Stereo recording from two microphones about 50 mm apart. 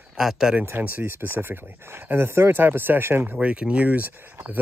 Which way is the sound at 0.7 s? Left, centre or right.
Right.